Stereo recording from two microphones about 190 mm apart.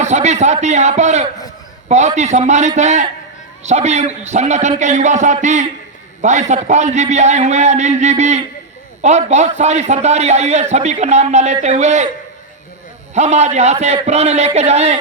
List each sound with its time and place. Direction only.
0.0 s a man's voice: 35° right (ahead or behind)
13.1 s a man's voice: 35° right (ahead or behind)